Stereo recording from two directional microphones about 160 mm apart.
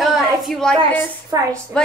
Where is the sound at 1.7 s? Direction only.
5° left (ahead or behind).